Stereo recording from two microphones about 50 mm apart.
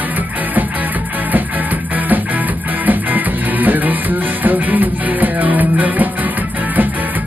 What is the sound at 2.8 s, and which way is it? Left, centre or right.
Music, right.